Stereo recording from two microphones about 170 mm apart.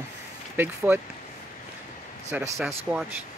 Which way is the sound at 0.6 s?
10° right (ahead or behind).